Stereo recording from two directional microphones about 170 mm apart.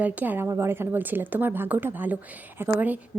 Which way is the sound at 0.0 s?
10° right (ahead or behind).